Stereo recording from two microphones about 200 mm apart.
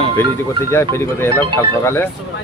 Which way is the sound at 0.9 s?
10° left (ahead or behind).